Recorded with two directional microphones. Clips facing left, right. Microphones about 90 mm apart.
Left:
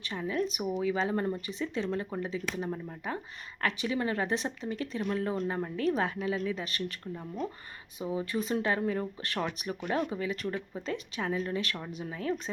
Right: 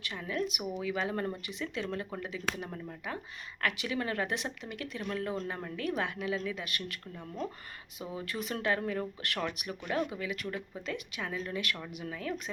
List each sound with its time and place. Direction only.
0.0 s speech: 25° left (ahead or behind)
7.9 s speech: 25° left (ahead or behind)